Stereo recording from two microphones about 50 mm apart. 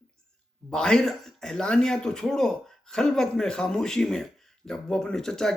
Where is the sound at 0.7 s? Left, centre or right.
Centre.